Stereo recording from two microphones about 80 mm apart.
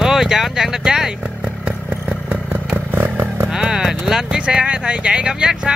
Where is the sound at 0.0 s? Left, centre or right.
Centre.